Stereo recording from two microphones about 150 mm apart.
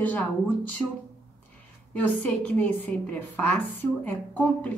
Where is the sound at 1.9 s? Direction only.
10° left (ahead or behind).